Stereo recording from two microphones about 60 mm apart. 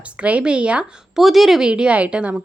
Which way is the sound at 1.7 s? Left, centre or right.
Centre.